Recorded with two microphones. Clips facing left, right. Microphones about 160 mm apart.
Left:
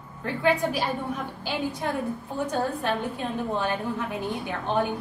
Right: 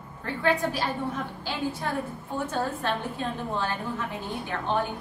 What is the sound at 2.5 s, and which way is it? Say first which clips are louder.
Speech: left 2 dB; 15° left (ahead or behind).